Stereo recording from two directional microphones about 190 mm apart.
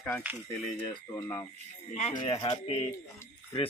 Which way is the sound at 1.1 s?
20° left (ahead or behind).